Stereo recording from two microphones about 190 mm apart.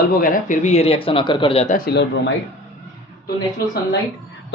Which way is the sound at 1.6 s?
50° left (ahead or behind).